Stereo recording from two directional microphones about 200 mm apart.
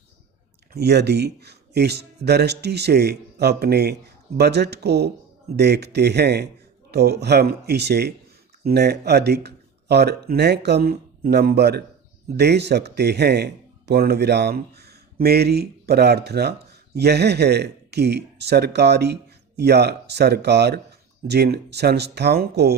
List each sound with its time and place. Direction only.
0.7 s speech: 55° right (ahead or behind)